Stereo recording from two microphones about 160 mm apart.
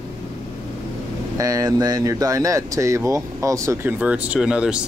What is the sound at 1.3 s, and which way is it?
Speech, 20° right (ahead or behind).